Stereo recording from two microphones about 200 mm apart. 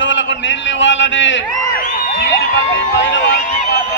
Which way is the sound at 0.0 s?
65° left (ahead or behind).